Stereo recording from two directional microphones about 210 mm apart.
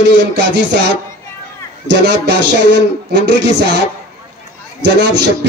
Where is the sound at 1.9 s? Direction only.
55° right (ahead or behind).